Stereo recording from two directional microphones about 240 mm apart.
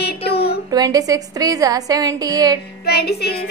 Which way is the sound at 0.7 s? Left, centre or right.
Centre.